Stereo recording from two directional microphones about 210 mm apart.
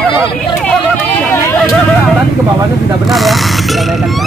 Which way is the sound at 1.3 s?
10° left (ahead or behind).